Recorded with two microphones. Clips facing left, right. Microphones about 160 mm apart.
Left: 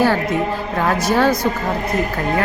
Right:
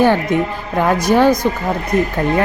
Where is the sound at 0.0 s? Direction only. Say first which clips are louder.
Right 3 dB; 20° right (ahead or behind).